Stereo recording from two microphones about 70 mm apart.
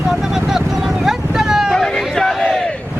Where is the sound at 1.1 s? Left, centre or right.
Centre.